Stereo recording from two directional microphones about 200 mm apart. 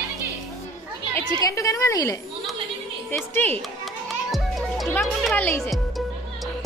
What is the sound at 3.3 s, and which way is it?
Speech, 10° left (ahead or behind).